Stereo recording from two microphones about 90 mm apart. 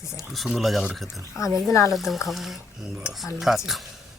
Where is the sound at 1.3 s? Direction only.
35° left (ahead or behind).